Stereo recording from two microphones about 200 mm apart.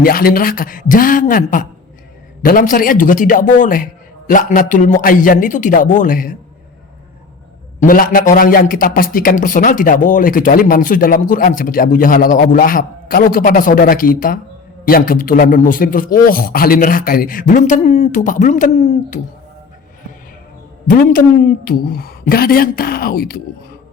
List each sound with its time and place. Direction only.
0.0 s a man's voice: 45° left (ahead or behind)
7.8 s a man's voice: 45° left (ahead or behind)
20.8 s a man's voice: 45° left (ahead or behind)